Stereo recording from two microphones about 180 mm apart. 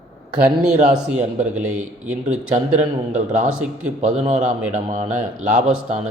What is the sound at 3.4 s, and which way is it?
Speech, 5° right (ahead or behind).